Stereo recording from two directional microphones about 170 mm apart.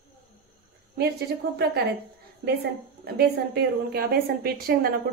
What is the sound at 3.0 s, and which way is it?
A woman's voice, 70° right (ahead or behind).